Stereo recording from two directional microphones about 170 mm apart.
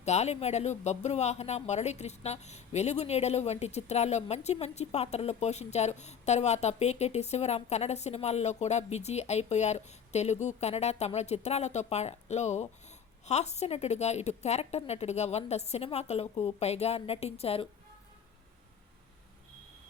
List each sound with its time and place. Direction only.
0.0 s speech: 40° left (ahead or behind)